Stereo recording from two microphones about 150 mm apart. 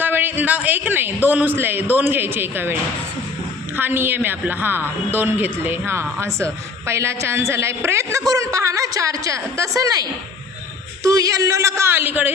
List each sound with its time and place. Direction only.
0.0 s a woman's voice: 15° right (ahead or behind)
3.8 s a woman's voice: 15° right (ahead or behind)